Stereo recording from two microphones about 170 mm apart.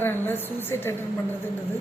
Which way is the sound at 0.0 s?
10° left (ahead or behind).